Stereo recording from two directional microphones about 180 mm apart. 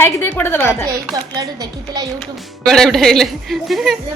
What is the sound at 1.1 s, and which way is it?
Speech, 20° right (ahead or behind).